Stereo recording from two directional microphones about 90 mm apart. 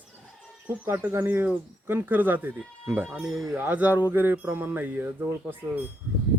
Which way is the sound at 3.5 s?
20° right (ahead or behind).